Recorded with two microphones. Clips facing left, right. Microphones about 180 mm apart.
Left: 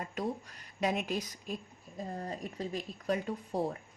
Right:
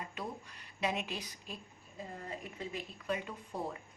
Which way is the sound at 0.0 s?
45° left (ahead or behind).